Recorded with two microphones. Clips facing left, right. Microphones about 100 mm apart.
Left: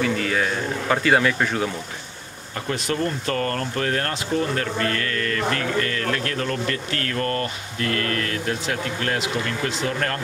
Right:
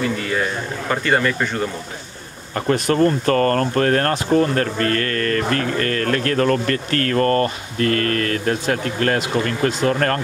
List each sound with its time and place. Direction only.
0.0 s a man's voice: centre (ahead or behind)
2.7 s speech: 50° right (ahead or behind)